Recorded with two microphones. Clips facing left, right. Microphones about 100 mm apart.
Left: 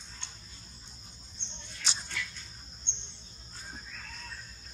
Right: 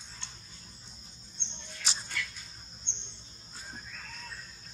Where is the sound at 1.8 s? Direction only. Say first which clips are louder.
Right 1 dB; centre (ahead or behind).